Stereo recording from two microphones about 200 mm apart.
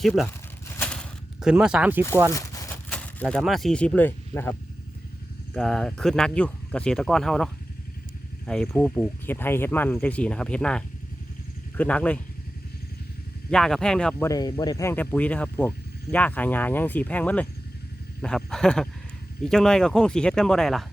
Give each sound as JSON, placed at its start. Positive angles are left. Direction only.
{"t": 1.4, "sound": "speech", "side_deg": -5}
{"t": 2.3, "sound": "a sound", "side_deg": 15}
{"t": 2.9, "sound": "speech", "side_deg": 5}
{"t": 5.5, "sound": "speech", "side_deg": 5}
{"t": 13.5, "sound": "speech", "side_deg": 5}
{"t": 14.3, "sound": "speech", "side_deg": 20}